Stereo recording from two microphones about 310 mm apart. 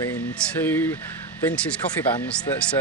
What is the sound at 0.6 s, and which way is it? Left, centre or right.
Speech, centre.